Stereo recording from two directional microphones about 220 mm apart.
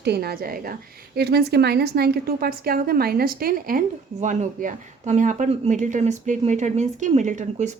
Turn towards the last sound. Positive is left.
turn(degrees=-35)  # may be behind; listen again after turning